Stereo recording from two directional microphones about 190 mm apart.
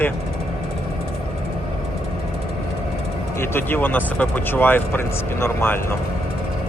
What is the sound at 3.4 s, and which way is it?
Speech, 10° left (ahead or behind).